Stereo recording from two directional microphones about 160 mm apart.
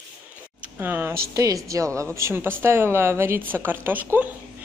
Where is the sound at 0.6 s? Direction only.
10° right (ahead or behind).